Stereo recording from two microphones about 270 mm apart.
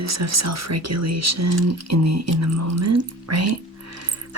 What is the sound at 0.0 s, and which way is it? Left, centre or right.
Speech, right.